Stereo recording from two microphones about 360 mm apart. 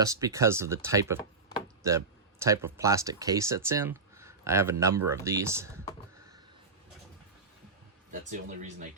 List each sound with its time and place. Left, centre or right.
0.0 s speech: centre
1.8 s a sound: centre
2.7 s speech: centre
8.1 s speech: right